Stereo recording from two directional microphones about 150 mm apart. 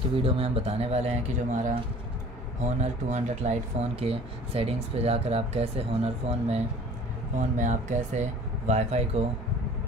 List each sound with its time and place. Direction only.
0.2 s speech: 40° right (ahead or behind)
1.5 s speech: 60° right (ahead or behind)
7.3 s speech: 55° right (ahead or behind)